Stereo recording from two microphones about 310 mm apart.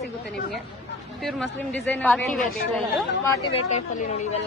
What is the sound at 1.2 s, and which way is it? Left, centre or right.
A woman's voice, centre.